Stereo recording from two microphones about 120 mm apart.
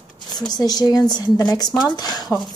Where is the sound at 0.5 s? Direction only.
35° left (ahead or behind).